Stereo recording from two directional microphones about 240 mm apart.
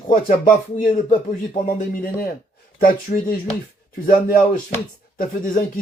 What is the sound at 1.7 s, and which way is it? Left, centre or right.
Speech, left.